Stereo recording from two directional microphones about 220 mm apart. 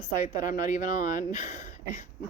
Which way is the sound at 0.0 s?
35° left (ahead or behind).